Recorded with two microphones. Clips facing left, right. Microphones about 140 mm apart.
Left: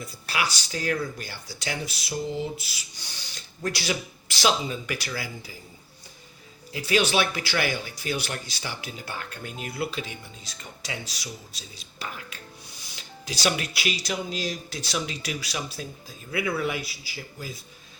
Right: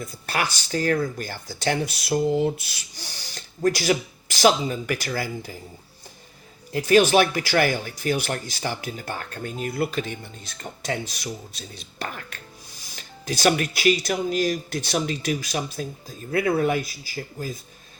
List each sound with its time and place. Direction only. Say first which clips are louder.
0.0 s speech: right 3 dB; 50° right (ahead or behind)
6.7 s speech: right 7 dB; 45° right (ahead or behind)